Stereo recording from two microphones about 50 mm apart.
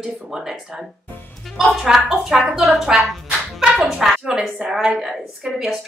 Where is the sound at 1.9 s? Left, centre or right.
Centre.